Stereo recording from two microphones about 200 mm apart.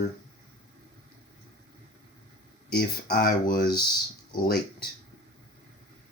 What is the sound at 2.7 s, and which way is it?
Speech, 50° left (ahead or behind).